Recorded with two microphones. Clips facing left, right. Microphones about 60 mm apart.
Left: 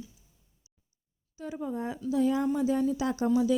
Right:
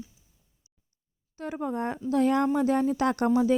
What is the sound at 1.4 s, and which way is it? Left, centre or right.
Speech, right.